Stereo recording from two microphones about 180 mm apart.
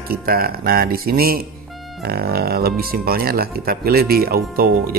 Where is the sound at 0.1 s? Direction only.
55° right (ahead or behind).